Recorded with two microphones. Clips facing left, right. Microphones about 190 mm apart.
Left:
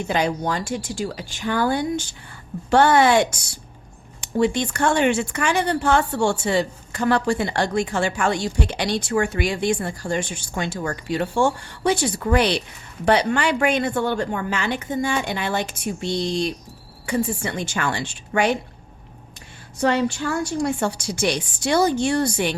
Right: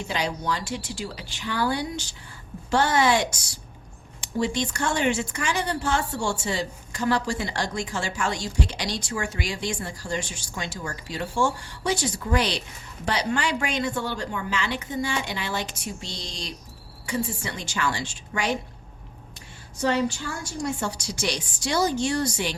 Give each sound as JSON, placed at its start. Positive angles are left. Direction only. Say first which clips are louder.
{"t": 0.1, "sound": "a woman's voice", "louder": "left 5 dB", "side_deg": 50}
{"t": 19.8, "sound": "a woman's voice", "louder": "left 4 dB", "side_deg": 60}